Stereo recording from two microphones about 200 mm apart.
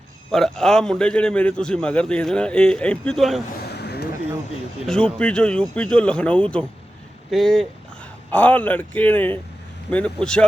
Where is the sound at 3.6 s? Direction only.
55° left (ahead or behind).